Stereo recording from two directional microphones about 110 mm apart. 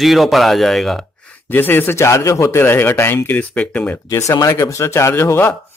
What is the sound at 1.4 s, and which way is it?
Speech, 20° left (ahead or behind).